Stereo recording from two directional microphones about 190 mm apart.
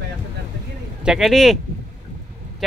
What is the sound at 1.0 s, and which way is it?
Speech, centre (ahead or behind).